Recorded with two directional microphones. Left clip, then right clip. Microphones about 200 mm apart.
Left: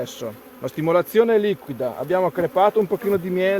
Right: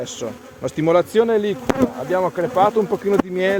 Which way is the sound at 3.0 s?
35° right (ahead or behind).